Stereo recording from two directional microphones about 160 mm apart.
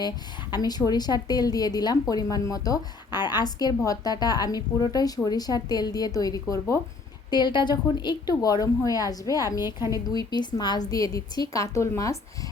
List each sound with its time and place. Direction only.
0.5 s speech: 25° left (ahead or behind)